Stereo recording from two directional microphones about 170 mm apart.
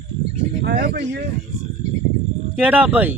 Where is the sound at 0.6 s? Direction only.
70° right (ahead or behind).